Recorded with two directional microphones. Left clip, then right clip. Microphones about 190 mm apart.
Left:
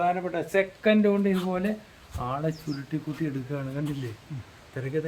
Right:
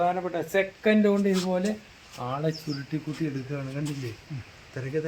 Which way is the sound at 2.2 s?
30° right (ahead or behind).